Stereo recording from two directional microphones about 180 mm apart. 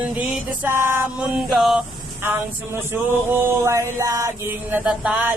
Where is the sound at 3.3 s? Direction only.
10° right (ahead or behind).